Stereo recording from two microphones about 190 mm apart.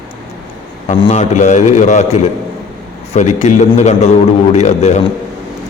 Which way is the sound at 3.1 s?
35° left (ahead or behind).